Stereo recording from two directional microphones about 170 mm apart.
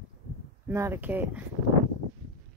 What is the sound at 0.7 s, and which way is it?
Speech, 15° right (ahead or behind).